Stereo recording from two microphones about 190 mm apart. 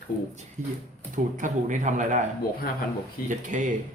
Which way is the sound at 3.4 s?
40° right (ahead or behind).